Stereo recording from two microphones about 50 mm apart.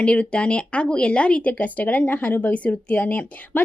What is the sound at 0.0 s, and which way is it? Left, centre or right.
A woman's voice, left.